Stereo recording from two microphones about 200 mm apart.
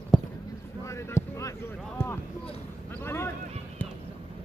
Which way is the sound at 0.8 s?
15° left (ahead or behind).